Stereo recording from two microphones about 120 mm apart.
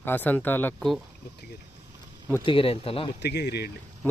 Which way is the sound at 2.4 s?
45° left (ahead or behind).